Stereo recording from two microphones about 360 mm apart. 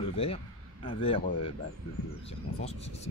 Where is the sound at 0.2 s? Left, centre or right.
Centre.